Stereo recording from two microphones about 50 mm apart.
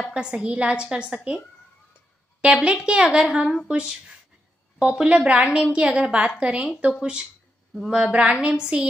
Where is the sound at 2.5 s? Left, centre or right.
Centre.